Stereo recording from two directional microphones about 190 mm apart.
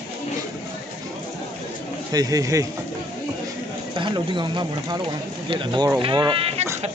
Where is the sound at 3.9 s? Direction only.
25° right (ahead or behind).